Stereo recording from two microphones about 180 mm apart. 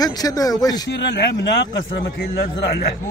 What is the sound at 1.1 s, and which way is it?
A man's voice, 70° left (ahead or behind).